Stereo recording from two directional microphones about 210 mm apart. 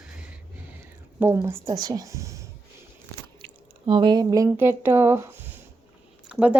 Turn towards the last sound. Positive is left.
turn(degrees=-5)  # may be behind; listen again after turning